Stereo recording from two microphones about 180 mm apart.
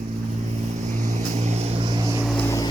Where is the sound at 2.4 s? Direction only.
15° left (ahead or behind).